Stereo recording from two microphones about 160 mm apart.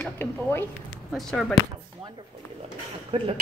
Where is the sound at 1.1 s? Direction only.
Centre (ahead or behind).